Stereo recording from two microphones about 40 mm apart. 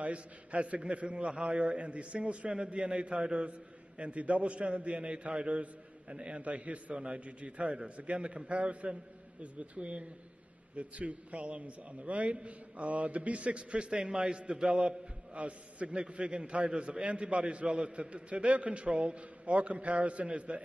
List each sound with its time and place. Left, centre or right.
0.0 s a man's voice: right